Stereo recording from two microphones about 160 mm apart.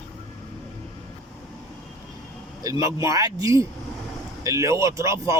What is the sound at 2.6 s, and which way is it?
Speech, 20° right (ahead or behind).